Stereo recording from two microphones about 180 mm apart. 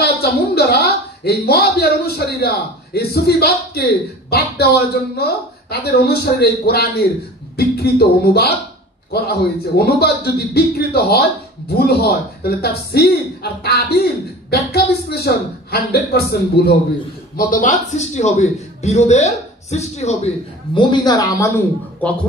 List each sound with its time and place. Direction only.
0.0 s a woman's voice: 60° left (ahead or behind)
17.4 s a man's voice: 50° left (ahead or behind); by 21.5 s 15° left (ahead or behind)
22.0 s a man's voice: 5° left (ahead or behind)